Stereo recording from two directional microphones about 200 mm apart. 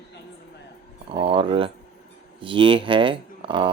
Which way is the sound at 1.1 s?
25° right (ahead or behind).